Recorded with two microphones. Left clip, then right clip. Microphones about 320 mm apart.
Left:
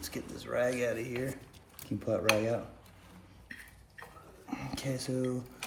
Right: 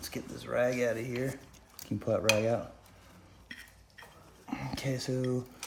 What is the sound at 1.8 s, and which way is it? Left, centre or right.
Dishes, right.